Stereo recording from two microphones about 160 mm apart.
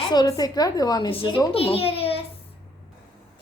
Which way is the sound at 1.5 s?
35° left (ahead or behind).